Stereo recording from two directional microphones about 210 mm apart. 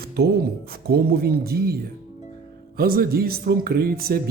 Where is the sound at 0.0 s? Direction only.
45° right (ahead or behind).